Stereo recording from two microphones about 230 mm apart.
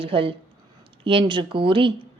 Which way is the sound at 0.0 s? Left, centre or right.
Right.